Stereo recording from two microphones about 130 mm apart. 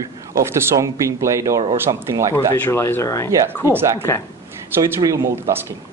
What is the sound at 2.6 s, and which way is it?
Speech, 20° left (ahead or behind).